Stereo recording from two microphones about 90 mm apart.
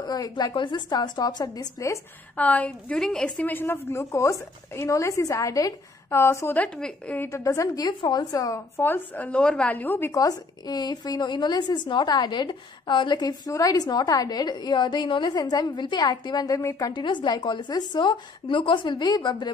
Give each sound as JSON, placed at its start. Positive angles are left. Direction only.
{"t": 0.0, "sound": "a woman's voice", "side_deg": 45}
{"t": 0.6, "sound": "a woman's voice", "side_deg": 60}
{"t": 2.3, "sound": "a woman's voice", "side_deg": 15}
{"t": 3.4, "sound": "a woman's voice", "side_deg": 25}
{"t": 6.0, "sound": "a woman's voice", "side_deg": 30}
{"t": 6.5, "sound": "a woman's voice", "side_deg": 15}
{"t": 7.2, "sound": "a woman's voice", "side_deg": 35}
{"t": 10.1, "sound": "a woman's voice", "side_deg": 45}
{"t": 13.5, "sound": "a woman's voice", "side_deg": 40}
{"t": 16.9, "sound": "a woman's voice", "side_deg": 60}